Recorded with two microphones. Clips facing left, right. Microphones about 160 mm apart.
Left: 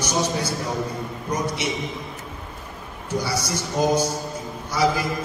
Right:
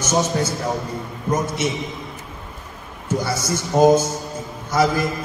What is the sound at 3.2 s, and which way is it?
A man's voice, 50° right (ahead or behind).